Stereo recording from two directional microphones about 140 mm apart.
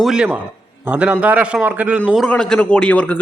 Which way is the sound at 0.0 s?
5° right (ahead or behind).